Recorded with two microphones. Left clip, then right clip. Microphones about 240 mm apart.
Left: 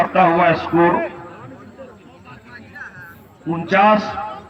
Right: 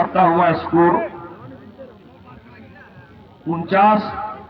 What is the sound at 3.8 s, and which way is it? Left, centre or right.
Speech, left.